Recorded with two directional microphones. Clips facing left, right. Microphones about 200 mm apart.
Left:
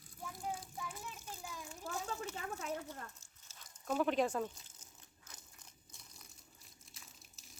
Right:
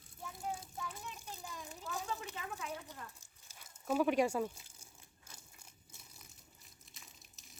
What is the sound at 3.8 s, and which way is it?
Speech, 10° right (ahead or behind).